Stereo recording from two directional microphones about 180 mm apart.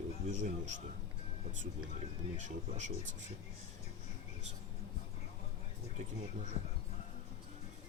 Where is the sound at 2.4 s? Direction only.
40° right (ahead or behind).